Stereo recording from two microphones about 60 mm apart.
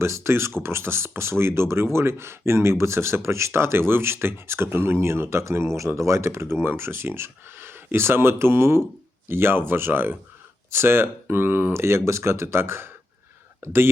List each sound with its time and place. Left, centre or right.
0.0 s speech: right
11.8 s speech: right